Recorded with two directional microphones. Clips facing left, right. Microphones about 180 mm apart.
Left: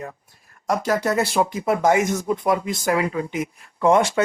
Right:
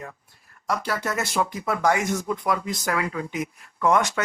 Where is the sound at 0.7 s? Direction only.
45° left (ahead or behind).